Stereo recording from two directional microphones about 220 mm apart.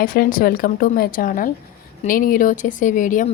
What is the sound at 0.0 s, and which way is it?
Speech, 40° left (ahead or behind).